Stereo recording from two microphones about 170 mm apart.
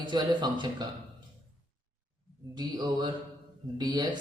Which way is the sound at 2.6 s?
25° right (ahead or behind).